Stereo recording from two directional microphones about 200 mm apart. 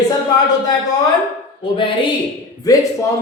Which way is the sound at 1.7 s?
25° left (ahead or behind).